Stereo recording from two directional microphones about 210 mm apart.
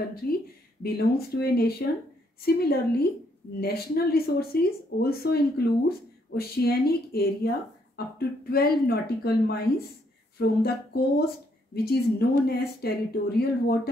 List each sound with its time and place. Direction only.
0.2 s speech: 45° left (ahead or behind)